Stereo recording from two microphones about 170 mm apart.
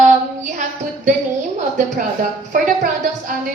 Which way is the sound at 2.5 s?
50° right (ahead or behind).